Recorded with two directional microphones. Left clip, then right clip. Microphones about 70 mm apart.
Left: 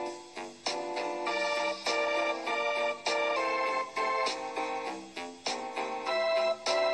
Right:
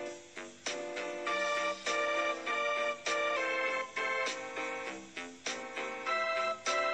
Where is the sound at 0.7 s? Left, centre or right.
Left.